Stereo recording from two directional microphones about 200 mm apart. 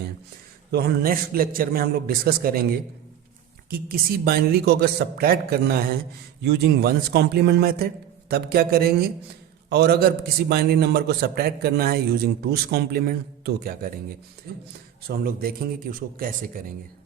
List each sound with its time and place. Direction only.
0.7 s a man's voice: 50° right (ahead or behind)
3.7 s a man's voice: 50° right (ahead or behind)
15.0 s a man's voice: 50° right (ahead or behind)